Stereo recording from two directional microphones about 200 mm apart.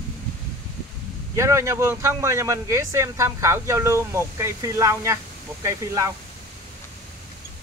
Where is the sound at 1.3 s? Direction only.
15° right (ahead or behind).